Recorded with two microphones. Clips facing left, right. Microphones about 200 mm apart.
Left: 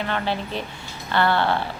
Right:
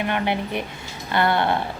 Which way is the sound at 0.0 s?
15° right (ahead or behind).